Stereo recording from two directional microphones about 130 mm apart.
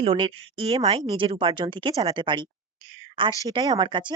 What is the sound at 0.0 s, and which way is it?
Speech, 40° right (ahead or behind).